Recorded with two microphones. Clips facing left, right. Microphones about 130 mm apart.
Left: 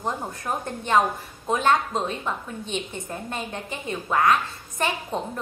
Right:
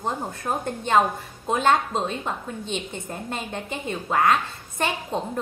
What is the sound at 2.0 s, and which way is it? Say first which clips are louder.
Speech: even; 25° right (ahead or behind).